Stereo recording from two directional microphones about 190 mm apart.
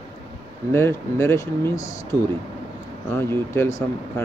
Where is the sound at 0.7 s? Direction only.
15° left (ahead or behind).